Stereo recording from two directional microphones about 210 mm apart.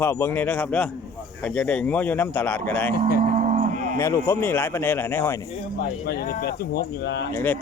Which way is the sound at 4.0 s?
10° left (ahead or behind).